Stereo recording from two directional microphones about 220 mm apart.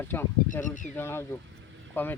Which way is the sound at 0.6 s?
35° left (ahead or behind).